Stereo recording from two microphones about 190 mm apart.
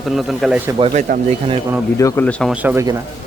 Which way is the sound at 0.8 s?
30° right (ahead or behind).